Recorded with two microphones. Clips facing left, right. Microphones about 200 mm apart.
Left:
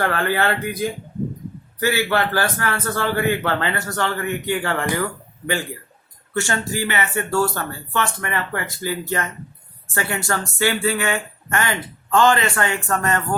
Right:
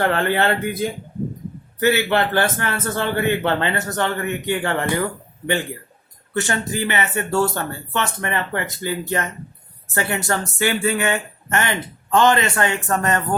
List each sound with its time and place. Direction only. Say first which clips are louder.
0.0 s a man's voice: right 2 dB; 25° right (ahead or behind)